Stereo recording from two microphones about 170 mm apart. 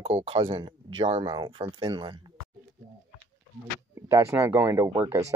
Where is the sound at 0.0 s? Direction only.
35° right (ahead or behind).